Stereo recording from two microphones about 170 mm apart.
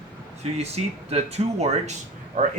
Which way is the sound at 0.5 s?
40° right (ahead or behind).